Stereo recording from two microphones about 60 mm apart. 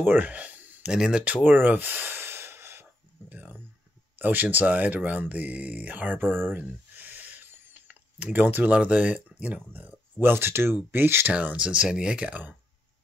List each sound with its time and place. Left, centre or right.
0.0 s speech: right
0.8 s speech: centre
1.2 s gasp: right
3.3 s a sound: right
4.2 s speech: right
10.2 s speech: right
11.3 s speech: right